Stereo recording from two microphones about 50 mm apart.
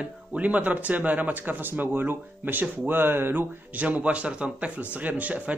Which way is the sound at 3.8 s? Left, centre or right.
Right.